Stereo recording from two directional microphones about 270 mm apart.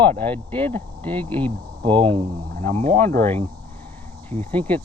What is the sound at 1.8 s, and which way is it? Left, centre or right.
Speech, centre.